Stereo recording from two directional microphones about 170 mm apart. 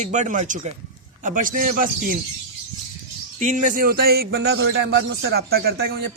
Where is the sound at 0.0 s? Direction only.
45° right (ahead or behind).